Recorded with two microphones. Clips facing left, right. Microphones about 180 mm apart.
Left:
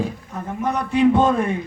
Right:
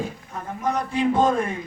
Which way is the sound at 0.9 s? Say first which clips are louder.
Left 5 dB; 65° left (ahead or behind).